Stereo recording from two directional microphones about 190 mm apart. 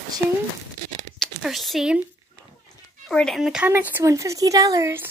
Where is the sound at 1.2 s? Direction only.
Centre (ahead or behind).